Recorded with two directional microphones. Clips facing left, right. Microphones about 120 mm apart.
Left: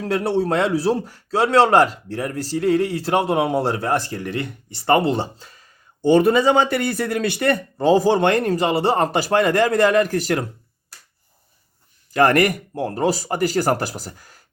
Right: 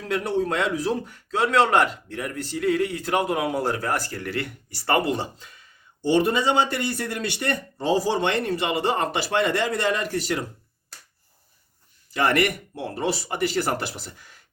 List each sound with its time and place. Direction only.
0.0 s a man's voice: 35° left (ahead or behind)
6.9 s a man's voice: 90° left
7.9 s speech: 55° left (ahead or behind)
12.1 s a man's voice: 45° left (ahead or behind)